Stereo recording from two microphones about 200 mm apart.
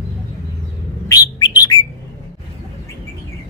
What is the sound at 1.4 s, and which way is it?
Bird, 20° left (ahead or behind).